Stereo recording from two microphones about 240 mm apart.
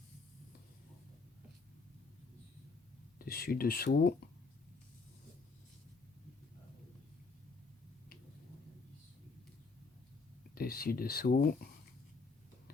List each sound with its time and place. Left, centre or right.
3.2 s speech: left
10.5 s speech: left